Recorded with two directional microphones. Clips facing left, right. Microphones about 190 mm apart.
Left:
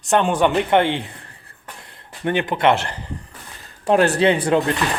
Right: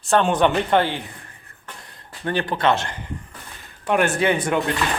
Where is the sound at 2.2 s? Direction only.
20° left (ahead or behind).